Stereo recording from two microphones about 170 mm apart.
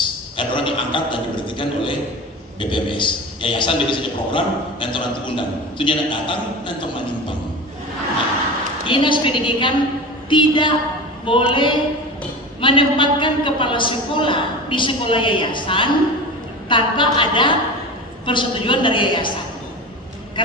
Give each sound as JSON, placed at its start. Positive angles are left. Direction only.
{"t": 0.4, "sound": "a man's voice", "side_deg": 30}
{"t": 8.8, "sound": "a man's voice", "side_deg": 30}
{"t": 20.4, "sound": "speech", "side_deg": 30}